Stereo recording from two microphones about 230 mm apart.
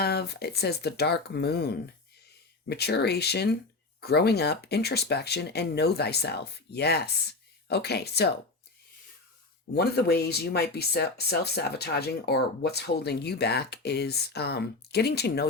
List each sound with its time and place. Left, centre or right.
0.0 s speech: left
9.7 s speech: left